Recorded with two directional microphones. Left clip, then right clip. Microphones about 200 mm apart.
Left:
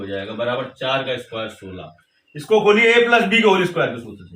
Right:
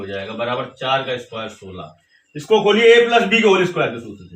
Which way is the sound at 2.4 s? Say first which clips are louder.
Right 2 dB; 5° right (ahead or behind).